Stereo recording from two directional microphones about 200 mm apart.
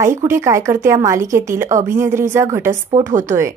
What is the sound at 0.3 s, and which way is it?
A woman's voice, 15° right (ahead or behind).